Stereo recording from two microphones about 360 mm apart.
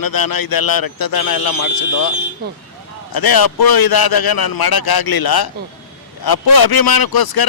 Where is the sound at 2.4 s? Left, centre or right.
Right.